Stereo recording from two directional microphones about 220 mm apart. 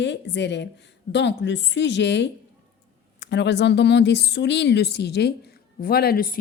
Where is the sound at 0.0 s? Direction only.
50° left (ahead or behind).